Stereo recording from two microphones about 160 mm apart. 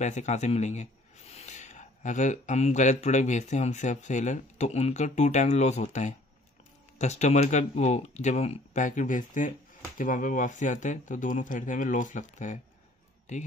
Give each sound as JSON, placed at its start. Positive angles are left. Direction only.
{"t": 0.0, "sound": "a man's voice", "side_deg": 50}